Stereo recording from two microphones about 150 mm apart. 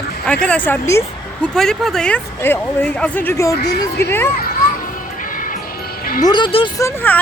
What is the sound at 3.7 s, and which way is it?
Speech, 90° left.